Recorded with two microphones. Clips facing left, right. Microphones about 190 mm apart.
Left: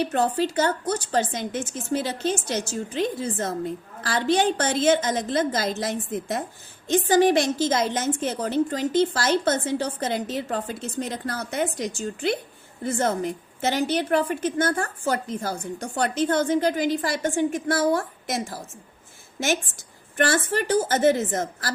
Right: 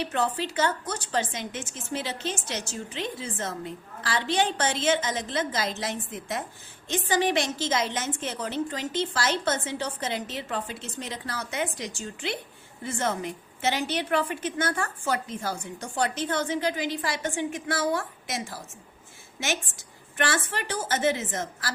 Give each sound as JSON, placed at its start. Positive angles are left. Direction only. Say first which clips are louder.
{"t": 0.0, "sound": "a woman's voice", "louder": "left 5 dB", "side_deg": 40}
{"t": 20.1, "sound": "a woman's voice", "louder": "left 6 dB", "side_deg": 45}